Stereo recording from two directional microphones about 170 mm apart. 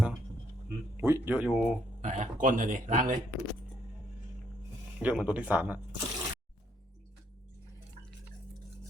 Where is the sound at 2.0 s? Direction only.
45° right (ahead or behind).